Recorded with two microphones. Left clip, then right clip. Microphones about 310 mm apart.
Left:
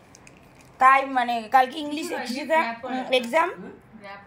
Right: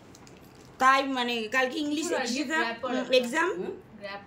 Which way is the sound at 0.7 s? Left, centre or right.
Centre.